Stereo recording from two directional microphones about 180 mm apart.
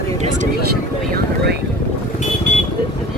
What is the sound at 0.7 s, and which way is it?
Speech, 60° right (ahead or behind).